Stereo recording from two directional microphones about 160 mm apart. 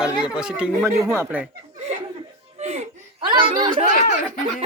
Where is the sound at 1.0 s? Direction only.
15° right (ahead or behind).